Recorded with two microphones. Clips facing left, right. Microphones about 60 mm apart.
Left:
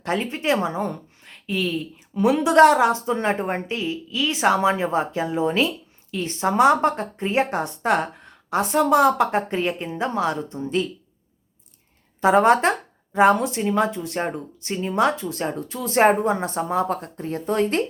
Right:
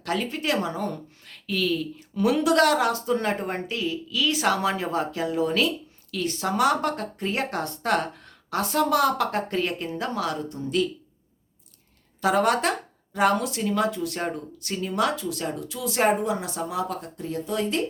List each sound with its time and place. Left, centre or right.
0.0 s speech: left
12.2 s speech: left